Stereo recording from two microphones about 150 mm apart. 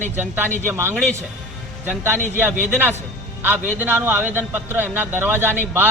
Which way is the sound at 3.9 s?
10° right (ahead or behind).